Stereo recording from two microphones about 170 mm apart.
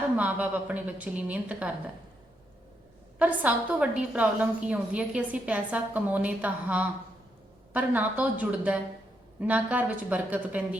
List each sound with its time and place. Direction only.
0.2 s a woman's voice: 10° right (ahead or behind)
3.2 s a woman's voice: 10° right (ahead or behind)